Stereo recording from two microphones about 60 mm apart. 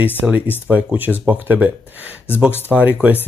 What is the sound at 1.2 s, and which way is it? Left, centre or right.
Speech, right.